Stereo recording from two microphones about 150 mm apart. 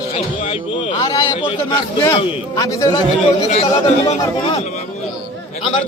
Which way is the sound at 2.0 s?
30° left (ahead or behind).